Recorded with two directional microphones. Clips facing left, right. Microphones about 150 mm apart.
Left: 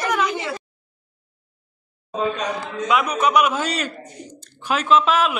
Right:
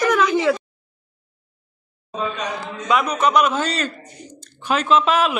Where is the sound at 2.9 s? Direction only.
5° left (ahead or behind).